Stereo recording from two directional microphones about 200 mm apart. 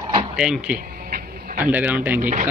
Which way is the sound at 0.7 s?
45° right (ahead or behind).